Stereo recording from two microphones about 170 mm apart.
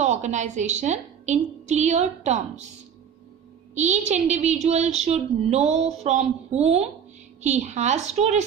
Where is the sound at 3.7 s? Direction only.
45° right (ahead or behind).